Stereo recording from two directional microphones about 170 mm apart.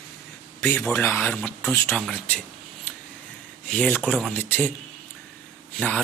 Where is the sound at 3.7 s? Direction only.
10° left (ahead or behind).